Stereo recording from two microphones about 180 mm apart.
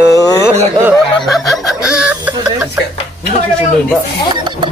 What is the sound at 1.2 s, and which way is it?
Speech, centre (ahead or behind).